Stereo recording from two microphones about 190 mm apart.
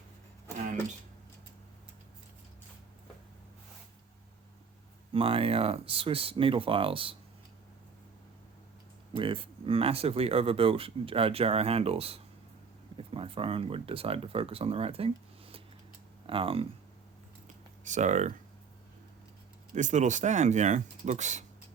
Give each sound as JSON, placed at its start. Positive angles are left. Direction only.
{"t": 5.1, "sound": "speech", "side_deg": -30}
{"t": 9.1, "sound": "speech", "side_deg": -30}
{"t": 17.8, "sound": "speech", "side_deg": -40}
{"t": 19.7, "sound": "speech", "side_deg": -40}